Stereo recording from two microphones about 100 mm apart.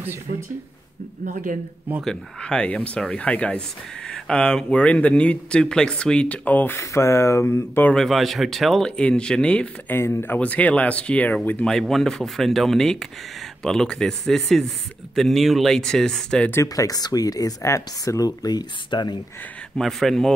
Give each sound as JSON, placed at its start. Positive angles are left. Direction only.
{"t": 2.0, "sound": "speech", "side_deg": 10}
{"t": 7.8, "sound": "speech", "side_deg": 5}
{"t": 9.9, "sound": "speech", "side_deg": 20}
{"t": 16.6, "sound": "speech", "side_deg": 35}
{"t": 19.8, "sound": "speech", "side_deg": 0}